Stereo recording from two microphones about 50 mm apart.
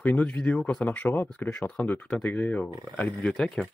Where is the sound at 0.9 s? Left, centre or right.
Left.